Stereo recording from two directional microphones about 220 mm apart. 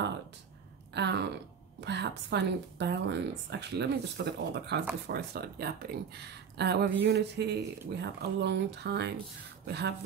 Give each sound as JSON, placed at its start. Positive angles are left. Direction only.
{"t": 0.9, "sound": "a woman's voice", "side_deg": -50}